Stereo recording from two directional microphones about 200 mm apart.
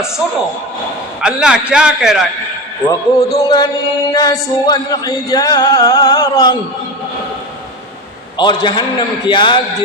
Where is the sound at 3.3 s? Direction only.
20° left (ahead or behind).